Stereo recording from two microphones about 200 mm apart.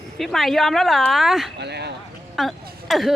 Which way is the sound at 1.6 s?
55° right (ahead or behind).